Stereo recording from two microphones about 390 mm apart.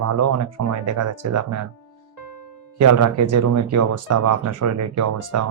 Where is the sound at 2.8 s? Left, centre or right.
Right.